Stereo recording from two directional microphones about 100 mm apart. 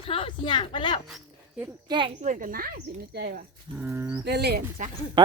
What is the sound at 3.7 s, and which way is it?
Bird, 55° right (ahead or behind).